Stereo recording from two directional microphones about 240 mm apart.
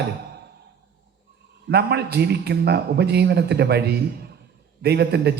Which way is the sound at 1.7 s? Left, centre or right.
Right.